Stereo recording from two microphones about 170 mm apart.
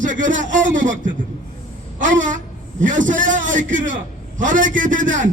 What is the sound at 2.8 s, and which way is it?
A man's voice, 50° right (ahead or behind).